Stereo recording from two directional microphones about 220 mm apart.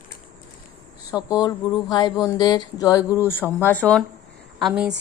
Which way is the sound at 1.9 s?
20° left (ahead or behind).